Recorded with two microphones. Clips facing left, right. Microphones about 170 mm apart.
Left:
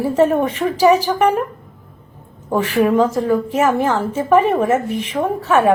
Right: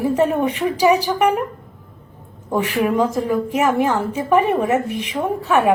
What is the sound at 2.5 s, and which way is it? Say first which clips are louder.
Speech: left 3 dB; 15° right (ahead or behind).